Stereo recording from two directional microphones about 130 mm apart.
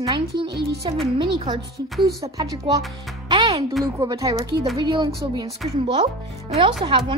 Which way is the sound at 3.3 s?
40° right (ahead or behind).